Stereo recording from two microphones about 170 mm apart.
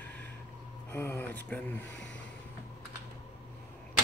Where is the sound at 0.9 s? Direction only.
15° left (ahead or behind).